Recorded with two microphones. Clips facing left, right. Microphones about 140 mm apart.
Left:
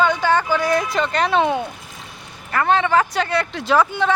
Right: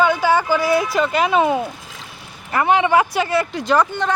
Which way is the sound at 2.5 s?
15° right (ahead or behind).